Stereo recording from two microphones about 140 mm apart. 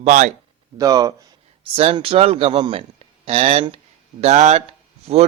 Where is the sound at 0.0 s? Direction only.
65° right (ahead or behind).